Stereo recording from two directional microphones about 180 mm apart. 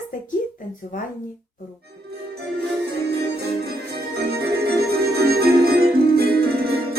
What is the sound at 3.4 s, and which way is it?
Music, 60° right (ahead or behind).